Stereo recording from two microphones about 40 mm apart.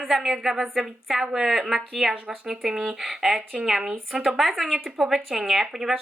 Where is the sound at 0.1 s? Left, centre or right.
Centre.